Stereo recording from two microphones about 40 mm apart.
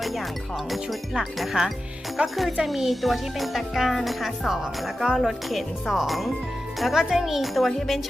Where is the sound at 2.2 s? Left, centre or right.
Right.